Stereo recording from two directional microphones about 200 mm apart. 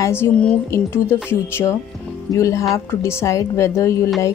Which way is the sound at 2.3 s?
15° left (ahead or behind).